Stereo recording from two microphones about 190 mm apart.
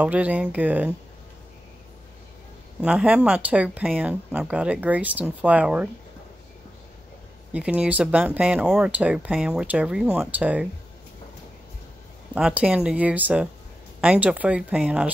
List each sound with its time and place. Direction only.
0.0 s speech: 10° right (ahead or behind)
2.8 s speech: 5° right (ahead or behind)
7.5 s speech: 5° right (ahead or behind)
12.4 s speech: 5° right (ahead or behind)